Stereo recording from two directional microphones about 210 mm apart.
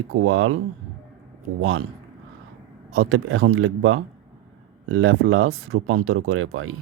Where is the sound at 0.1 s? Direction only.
85° right.